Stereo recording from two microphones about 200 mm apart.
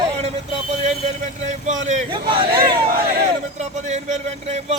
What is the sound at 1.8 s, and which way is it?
Speech, 30° right (ahead or behind).